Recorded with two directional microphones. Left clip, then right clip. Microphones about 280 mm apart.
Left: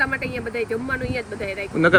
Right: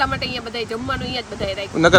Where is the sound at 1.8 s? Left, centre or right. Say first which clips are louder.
Right 3 dB; centre.